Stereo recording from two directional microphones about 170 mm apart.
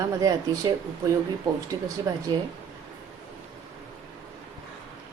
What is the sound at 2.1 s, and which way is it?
Speech, 20° right (ahead or behind).